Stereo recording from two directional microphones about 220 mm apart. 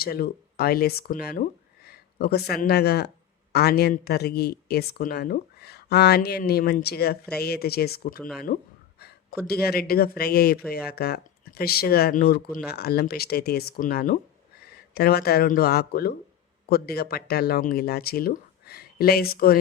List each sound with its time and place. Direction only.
0.0 s speech: 45° left (ahead or behind)